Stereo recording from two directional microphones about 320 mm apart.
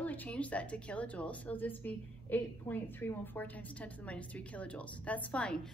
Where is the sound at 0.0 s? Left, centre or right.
Centre.